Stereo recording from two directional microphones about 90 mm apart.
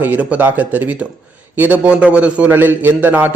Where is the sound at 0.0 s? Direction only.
15° right (ahead or behind).